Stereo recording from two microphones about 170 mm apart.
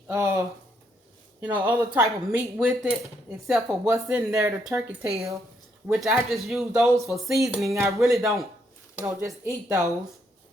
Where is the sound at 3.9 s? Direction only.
15° right (ahead or behind).